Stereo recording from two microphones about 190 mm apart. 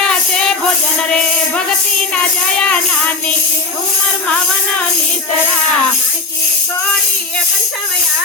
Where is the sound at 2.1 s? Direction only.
5° left (ahead or behind).